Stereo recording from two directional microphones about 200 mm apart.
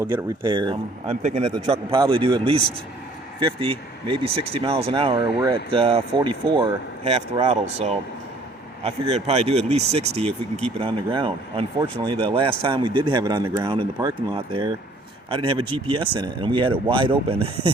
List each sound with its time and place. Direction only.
0.0 s speech: 20° right (ahead or behind)
1.2 s speech: 35° right (ahead or behind)